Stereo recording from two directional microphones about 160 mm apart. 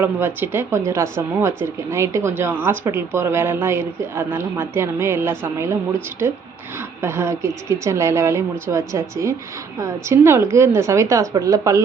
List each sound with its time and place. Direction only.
0.0 s speech: 15° right (ahead or behind)